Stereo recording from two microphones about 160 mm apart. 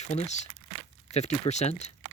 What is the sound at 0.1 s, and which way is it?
Speech, 45° left (ahead or behind).